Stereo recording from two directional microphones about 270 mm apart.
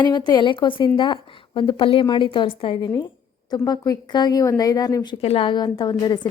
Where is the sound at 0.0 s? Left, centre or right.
Centre.